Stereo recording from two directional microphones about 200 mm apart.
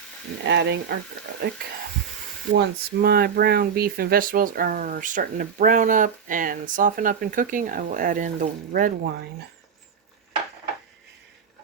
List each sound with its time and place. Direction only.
0.4 s speech: 60° right (ahead or behind)
2.6 s speech: 50° right (ahead or behind)